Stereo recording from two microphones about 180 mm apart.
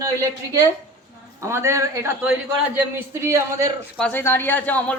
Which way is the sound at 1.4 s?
15° right (ahead or behind).